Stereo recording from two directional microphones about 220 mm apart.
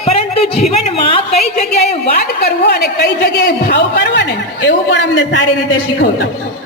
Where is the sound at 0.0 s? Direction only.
25° left (ahead or behind).